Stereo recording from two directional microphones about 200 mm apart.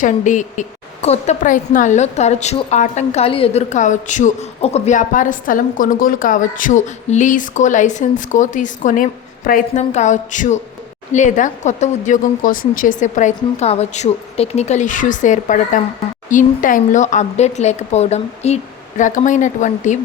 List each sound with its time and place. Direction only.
0.0 s a woman's voice: 40° left (ahead or behind)